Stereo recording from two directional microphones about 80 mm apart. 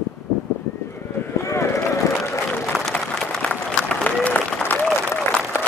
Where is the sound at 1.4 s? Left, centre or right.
Left.